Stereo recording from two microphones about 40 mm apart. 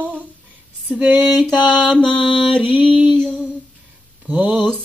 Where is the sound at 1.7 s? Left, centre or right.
Left.